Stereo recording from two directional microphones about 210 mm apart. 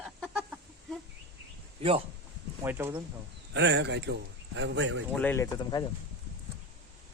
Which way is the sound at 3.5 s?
55° right (ahead or behind).